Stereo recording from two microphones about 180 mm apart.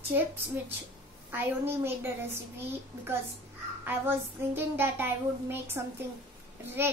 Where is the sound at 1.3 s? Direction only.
10° right (ahead or behind).